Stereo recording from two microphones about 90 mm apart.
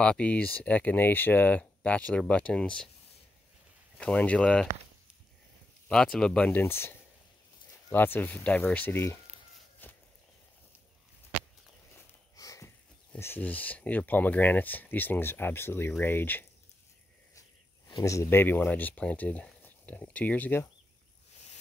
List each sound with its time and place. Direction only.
0.0 s speech: 10° left (ahead or behind)
4.0 s speech: 15° left (ahead or behind)
5.9 s speech: 10° left (ahead or behind)
6.6 s speech: 25° left (ahead or behind)
9.8 s a sound: 20° left (ahead or behind)
12.4 s a sound: 40° left (ahead or behind)
13.2 s speech: 20° left (ahead or behind)
17.4 s speech: 40° left (ahead or behind); by 20.6 s 20° left (ahead or behind)